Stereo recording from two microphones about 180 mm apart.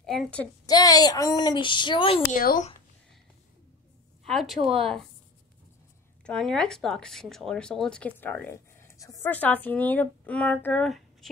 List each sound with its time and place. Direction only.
0.0 s a woman's voice: centre (ahead or behind)
0.7 s speech: 20° left (ahead or behind)
2.3 s speech: 50° left (ahead or behind)
4.3 s a woman's voice: centre (ahead or behind)
6.2 s speech: 5° left (ahead or behind)